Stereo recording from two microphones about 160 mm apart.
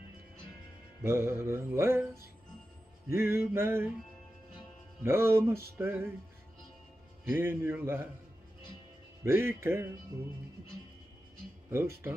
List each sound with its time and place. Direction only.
1.0 s music: 15° right (ahead or behind)
3.1 s music: 15° right (ahead or behind)
5.0 s music: 15° right (ahead or behind)
7.2 s music: 15° right (ahead or behind)
9.2 s music: 15° right (ahead or behind)
11.7 s music: 15° right (ahead or behind)